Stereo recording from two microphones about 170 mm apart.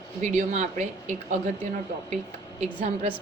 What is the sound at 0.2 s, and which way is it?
Speech, 45° right (ahead or behind).